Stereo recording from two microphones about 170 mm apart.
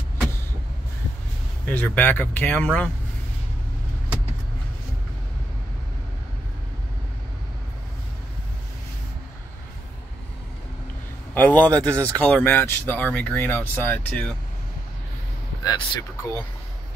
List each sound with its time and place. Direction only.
1.7 s speech: 10° left (ahead or behind)
11.3 s speech: 10° left (ahead or behind)
15.6 s speech: 20° left (ahead or behind)